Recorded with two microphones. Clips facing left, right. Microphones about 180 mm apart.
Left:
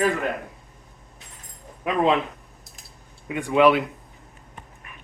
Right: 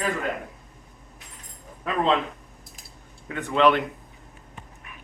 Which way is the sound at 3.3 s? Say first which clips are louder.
Left 3 dB; 10° left (ahead or behind).